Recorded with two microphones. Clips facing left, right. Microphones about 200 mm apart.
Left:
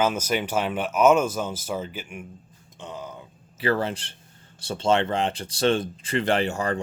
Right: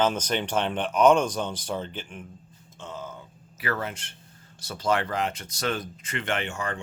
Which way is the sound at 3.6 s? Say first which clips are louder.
Left 6 dB; 30° left (ahead or behind).